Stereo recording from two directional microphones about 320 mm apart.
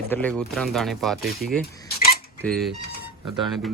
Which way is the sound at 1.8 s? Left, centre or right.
Left.